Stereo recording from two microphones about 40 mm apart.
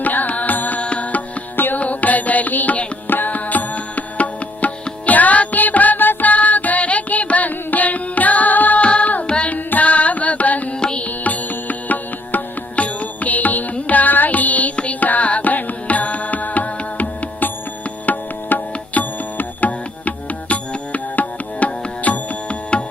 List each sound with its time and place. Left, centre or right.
0.0 s music: left
0.8 s music: left
1.5 s music: left
1.8 s music: left
6.3 s carnatic music: left
8.8 s carnatic music: left
9.2 s carnatic music: left
9.5 s carnatic music: left
10.8 s music: left
11.0 s music: left
18.0 s tabla: left